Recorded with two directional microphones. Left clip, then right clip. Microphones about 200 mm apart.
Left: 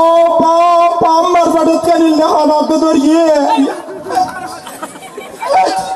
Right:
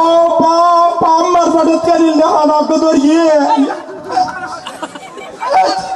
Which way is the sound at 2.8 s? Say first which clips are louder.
Even; 40° left (ahead or behind).